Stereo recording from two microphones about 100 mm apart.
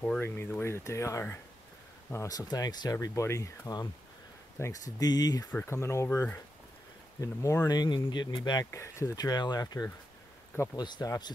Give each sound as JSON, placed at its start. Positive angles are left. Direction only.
{"t": 0.2, "sound": "speech", "side_deg": 20}
{"t": 5.7, "sound": "speech", "side_deg": 30}
{"t": 8.7, "sound": "speech", "side_deg": 30}